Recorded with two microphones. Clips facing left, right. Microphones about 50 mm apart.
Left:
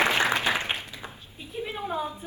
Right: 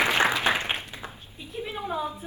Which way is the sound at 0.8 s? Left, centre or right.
Right.